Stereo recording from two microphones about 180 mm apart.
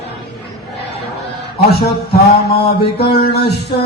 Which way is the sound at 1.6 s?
60° left (ahead or behind).